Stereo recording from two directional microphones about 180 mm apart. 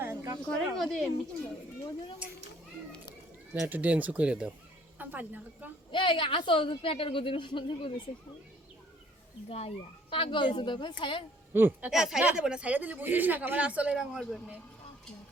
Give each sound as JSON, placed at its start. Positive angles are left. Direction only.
{"t": 0.0, "sound": "a sound", "side_deg": -15}
{"t": 0.8, "sound": "speech", "side_deg": 0}
{"t": 2.2, "sound": "speech", "side_deg": -5}
{"t": 3.5, "sound": "speech", "side_deg": -10}
{"t": 5.9, "sound": "a woman's voice", "side_deg": 25}
{"t": 9.5, "sound": "a woman's voice", "side_deg": 35}
{"t": 11.5, "sound": "speech", "side_deg": -10}